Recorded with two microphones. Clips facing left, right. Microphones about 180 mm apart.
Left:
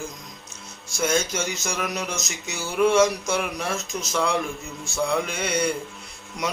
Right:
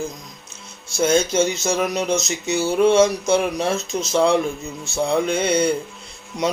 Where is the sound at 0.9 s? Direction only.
25° right (ahead or behind).